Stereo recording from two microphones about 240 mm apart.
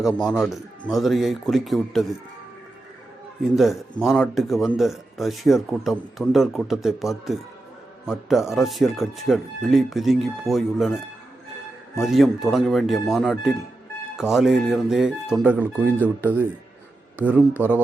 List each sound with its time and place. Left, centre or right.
0.0 s speech: centre
3.5 s speech: centre
17.2 s speech: centre